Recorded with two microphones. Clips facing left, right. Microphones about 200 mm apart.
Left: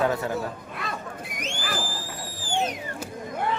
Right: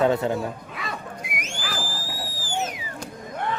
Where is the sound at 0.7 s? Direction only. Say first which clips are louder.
Even; centre (ahead or behind).